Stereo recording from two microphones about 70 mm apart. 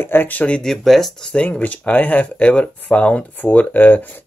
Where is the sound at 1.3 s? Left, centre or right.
Centre.